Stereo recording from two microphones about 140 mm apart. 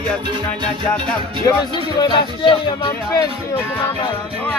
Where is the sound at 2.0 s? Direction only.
30° left (ahead or behind).